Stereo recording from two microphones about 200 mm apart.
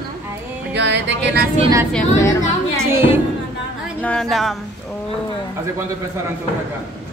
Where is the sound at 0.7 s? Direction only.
60° right (ahead or behind).